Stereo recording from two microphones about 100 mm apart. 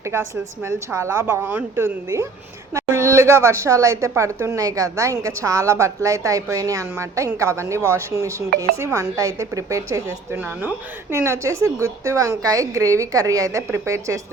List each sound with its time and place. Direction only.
0.0 s a woman's voice: 25° right (ahead or behind)
10.3 s a woman's voice: 20° right (ahead or behind)